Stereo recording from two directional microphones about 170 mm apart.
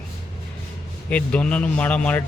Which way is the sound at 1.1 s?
5° left (ahead or behind).